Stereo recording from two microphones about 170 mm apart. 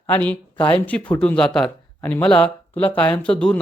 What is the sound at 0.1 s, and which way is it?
Speech, 10° left (ahead or behind).